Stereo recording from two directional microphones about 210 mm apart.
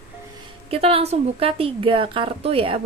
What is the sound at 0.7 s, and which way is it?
A woman's voice, 25° right (ahead or behind).